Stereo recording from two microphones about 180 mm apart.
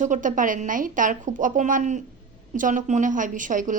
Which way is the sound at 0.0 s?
45° right (ahead or behind).